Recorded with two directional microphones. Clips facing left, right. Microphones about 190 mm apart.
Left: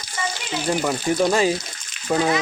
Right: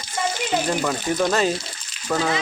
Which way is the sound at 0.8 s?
10° left (ahead or behind).